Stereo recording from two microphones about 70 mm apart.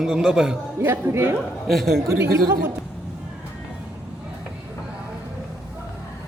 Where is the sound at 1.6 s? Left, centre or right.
Centre.